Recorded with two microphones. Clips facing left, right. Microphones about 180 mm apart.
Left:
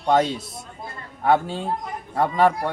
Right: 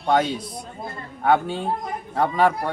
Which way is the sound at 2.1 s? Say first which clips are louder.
Left 1 dB; centre (ahead or behind).